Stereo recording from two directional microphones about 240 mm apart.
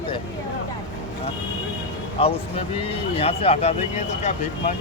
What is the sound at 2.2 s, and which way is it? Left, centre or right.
Speech, left.